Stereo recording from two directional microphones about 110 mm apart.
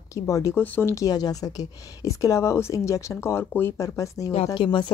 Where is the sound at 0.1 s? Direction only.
30° left (ahead or behind).